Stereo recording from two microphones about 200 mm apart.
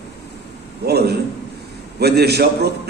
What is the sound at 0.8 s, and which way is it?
A man's voice, 55° right (ahead or behind).